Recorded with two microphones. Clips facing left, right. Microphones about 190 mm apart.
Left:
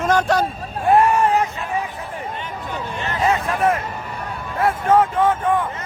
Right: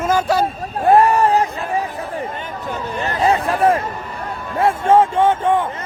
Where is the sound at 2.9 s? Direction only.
35° right (ahead or behind).